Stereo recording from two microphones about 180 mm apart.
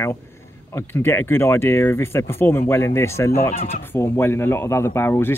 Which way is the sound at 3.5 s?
35° left (ahead or behind).